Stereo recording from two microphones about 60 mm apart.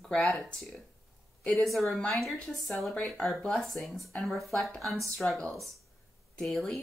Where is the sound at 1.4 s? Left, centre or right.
Centre.